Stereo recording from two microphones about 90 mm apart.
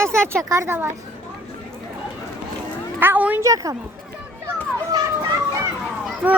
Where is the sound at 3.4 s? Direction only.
40° right (ahead or behind).